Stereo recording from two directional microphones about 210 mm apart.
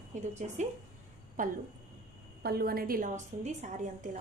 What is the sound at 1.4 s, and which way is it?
A woman's voice, 40° right (ahead or behind).